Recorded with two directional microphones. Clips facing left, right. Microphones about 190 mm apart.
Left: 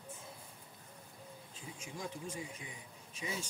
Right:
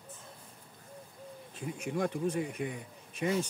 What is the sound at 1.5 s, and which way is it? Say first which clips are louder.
Speech: right 13 dB; 65° right (ahead or behind).